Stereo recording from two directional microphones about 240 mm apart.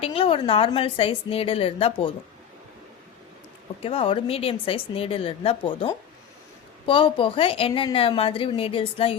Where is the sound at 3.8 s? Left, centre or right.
Left.